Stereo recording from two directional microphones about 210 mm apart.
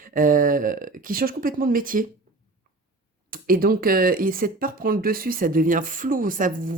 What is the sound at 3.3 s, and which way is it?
Speech, 45° right (ahead or behind).